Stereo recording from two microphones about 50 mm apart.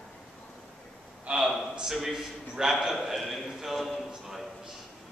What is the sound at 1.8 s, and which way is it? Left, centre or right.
A man's voice, centre.